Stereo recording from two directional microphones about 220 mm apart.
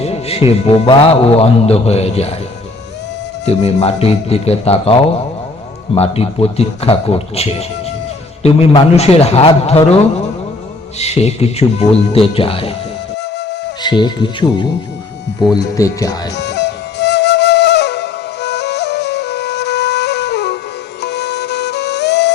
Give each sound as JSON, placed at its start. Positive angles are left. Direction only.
{"t": 0.0, "sound": "music", "side_deg": 25}
{"t": 0.6, "sound": "speech", "side_deg": 25}
{"t": 3.4, "sound": "speech", "side_deg": 30}
{"t": 11.0, "sound": "speech", "side_deg": 30}
{"t": 13.8, "sound": "speech", "side_deg": 20}
{"t": 16.4, "sound": "flute", "side_deg": 50}